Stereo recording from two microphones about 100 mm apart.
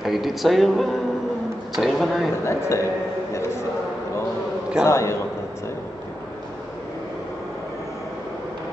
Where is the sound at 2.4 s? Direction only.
25° left (ahead or behind).